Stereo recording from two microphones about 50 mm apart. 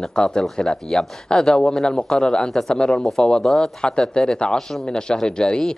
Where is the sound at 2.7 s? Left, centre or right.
Centre.